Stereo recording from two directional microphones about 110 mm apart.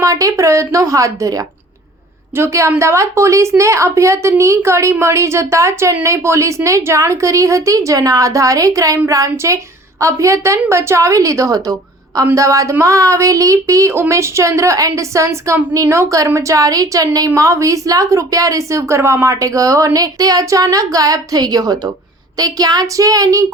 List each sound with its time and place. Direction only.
0.0 s speech: 30° right (ahead or behind)